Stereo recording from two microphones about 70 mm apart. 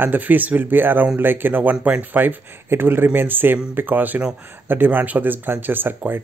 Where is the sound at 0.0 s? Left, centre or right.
Right.